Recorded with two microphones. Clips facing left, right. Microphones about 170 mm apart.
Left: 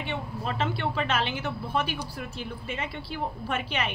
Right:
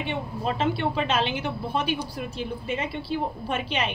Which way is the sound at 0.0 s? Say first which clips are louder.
Right 4 dB; 20° right (ahead or behind).